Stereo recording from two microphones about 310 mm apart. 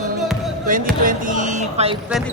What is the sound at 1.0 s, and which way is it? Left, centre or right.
Speech, right.